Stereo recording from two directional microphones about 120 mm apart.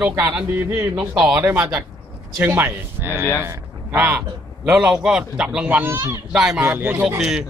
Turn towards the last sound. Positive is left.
turn(degrees=-10)  # may be behind; listen again after turning